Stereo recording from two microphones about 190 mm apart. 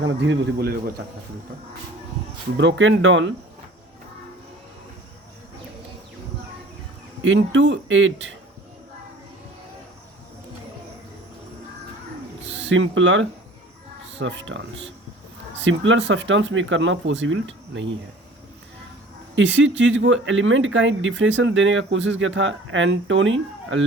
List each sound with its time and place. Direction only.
0.0 s a man's voice: 75° right (ahead or behind); by 0.9 s 55° right (ahead or behind)
2.6 s speech: 75° right (ahead or behind); by 3.3 s 90° right
7.2 s a man's voice: 80° right
12.5 s speech: 70° right (ahead or behind); by 13.2 s 90° right
14.1 s a man's voice: 75° right (ahead or behind)
19.4 s speech: 75° right (ahead or behind)